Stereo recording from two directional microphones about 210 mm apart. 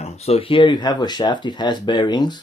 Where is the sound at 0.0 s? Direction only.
30° left (ahead or behind).